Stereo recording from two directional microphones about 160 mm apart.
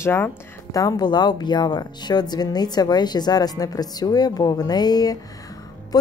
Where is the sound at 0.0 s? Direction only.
15° left (ahead or behind).